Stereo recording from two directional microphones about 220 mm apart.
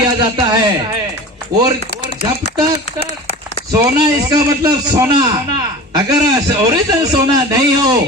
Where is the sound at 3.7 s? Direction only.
15° right (ahead or behind).